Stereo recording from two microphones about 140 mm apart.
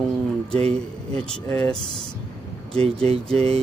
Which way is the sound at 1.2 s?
5° left (ahead or behind).